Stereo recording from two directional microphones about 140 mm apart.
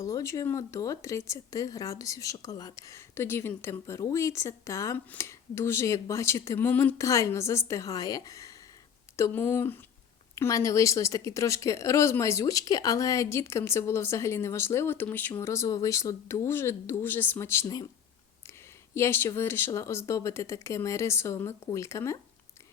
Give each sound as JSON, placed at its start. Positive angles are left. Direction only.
{"t": 0.0, "sound": "speech", "side_deg": 20}
{"t": 18.9, "sound": "speech", "side_deg": 15}